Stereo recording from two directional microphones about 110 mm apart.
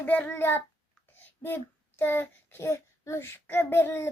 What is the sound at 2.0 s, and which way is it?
A child's voice, 20° left (ahead or behind).